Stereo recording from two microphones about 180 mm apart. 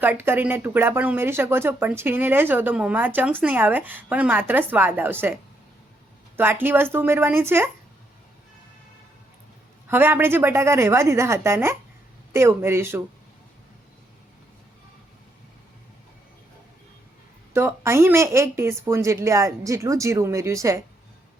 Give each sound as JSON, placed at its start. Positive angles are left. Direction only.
{"t": 0.0, "sound": "speech", "side_deg": -10}
{"t": 6.3, "sound": "speech", "side_deg": -10}
{"t": 9.9, "sound": "speech", "side_deg": -10}
{"t": 17.5, "sound": "speech", "side_deg": -15}